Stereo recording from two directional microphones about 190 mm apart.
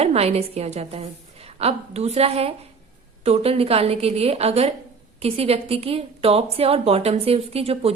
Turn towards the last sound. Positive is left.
turn(degrees=-30)  # may be behind; listen again after turning